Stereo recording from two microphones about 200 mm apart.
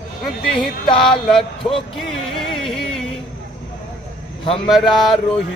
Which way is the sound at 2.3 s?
Centre (ahead or behind).